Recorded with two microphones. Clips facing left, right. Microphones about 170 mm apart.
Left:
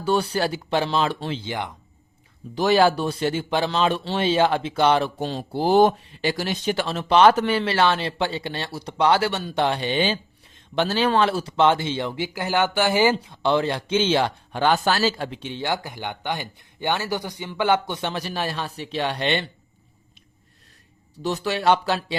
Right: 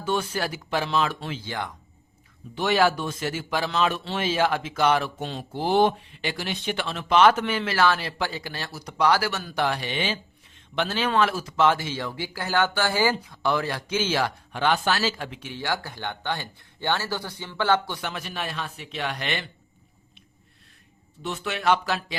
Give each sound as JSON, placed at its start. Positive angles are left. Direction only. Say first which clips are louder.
{"t": 0.0, "sound": "speech", "louder": "left 5 dB", "side_deg": 35}
{"t": 1.5, "sound": "speech", "louder": "left 3 dB", "side_deg": 20}
{"t": 2.6, "sound": "speech", "louder": "left 4 dB", "side_deg": 35}
{"t": 18.1, "sound": "speech", "louder": "left 5 dB", "side_deg": 35}
{"t": 21.2, "sound": "speech", "louder": "left 6 dB", "side_deg": 35}